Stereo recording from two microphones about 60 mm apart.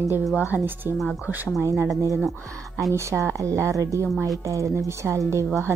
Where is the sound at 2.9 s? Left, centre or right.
Right.